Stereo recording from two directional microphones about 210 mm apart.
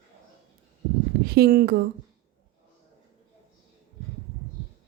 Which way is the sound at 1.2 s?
50° right (ahead or behind).